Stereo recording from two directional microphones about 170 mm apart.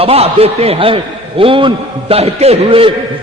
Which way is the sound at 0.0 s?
35° right (ahead or behind).